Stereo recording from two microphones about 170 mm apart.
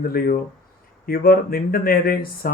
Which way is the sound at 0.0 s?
65° left (ahead or behind).